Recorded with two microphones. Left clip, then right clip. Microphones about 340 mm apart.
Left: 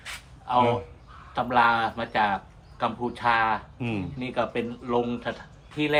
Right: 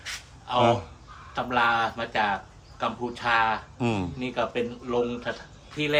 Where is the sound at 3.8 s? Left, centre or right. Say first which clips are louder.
Right 4 dB; centre.